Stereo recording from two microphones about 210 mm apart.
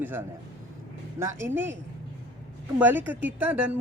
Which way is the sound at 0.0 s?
10° right (ahead or behind).